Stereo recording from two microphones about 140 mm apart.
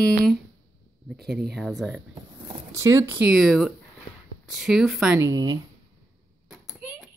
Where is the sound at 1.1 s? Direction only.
Centre (ahead or behind).